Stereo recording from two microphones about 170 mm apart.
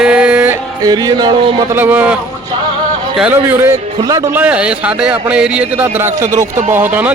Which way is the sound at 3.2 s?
10° right (ahead or behind).